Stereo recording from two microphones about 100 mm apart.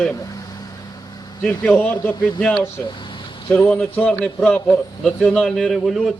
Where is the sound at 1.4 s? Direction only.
10° left (ahead or behind).